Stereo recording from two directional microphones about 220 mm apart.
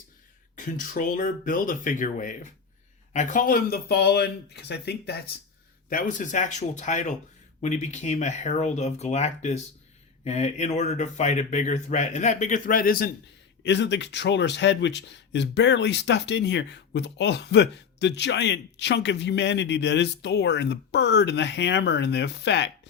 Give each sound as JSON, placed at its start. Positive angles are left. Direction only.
{"t": 0.5, "sound": "speech", "side_deg": 35}
{"t": 13.6, "sound": "speech", "side_deg": 55}